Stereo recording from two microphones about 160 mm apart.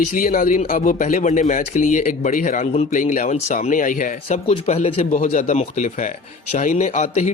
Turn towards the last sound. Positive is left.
turn(degrees=50)  # may be behind; listen again after turning